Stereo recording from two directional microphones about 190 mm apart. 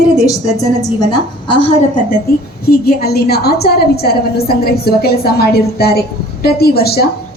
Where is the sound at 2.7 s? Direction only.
55° left (ahead or behind).